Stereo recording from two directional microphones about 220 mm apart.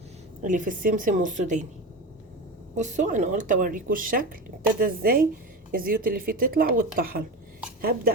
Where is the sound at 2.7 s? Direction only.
35° right (ahead or behind).